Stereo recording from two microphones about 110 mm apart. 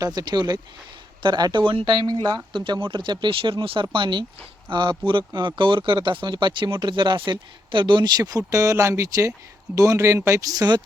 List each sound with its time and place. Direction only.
0.0 s speech: 35° right (ahead or behind)